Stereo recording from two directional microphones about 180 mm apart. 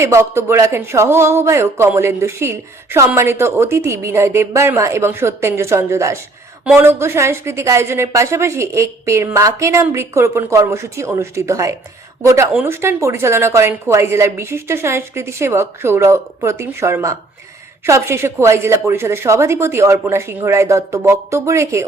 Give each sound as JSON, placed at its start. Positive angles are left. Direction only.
{"t": 0.0, "sound": "speech", "side_deg": -15}